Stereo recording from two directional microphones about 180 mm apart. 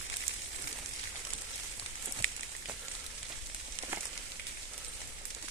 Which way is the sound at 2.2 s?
90° left.